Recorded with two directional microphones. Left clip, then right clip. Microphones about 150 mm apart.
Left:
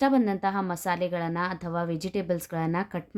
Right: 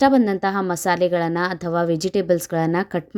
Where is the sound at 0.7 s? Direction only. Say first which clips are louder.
Right 9 dB; 35° right (ahead or behind).